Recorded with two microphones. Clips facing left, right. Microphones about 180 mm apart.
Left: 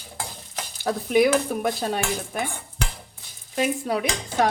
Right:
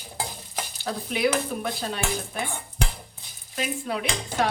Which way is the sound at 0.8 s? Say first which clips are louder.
Left 6 dB; 50° left (ahead or behind).